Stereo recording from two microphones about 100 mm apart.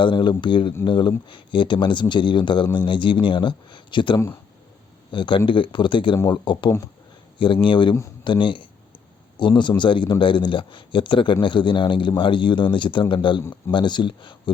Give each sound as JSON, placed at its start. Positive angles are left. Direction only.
{"t": 0.0, "sound": "a man's voice", "side_deg": 50}